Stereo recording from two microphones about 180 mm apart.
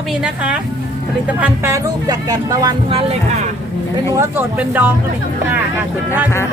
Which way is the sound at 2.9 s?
35° right (ahead or behind).